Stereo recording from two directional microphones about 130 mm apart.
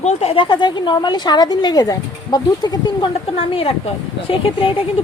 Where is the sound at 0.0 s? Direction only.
60° left (ahead or behind).